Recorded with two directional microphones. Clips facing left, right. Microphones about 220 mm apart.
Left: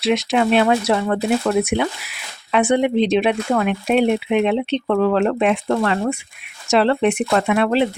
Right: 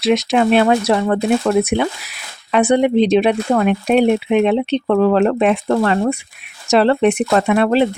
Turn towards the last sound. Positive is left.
turn(degrees=-40)  # may be behind; listen again after turning